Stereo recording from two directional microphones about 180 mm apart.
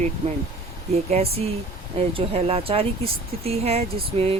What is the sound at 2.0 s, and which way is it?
Speech, 35° right (ahead or behind).